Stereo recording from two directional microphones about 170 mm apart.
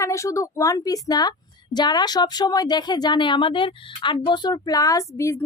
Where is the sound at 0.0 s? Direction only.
15° left (ahead or behind).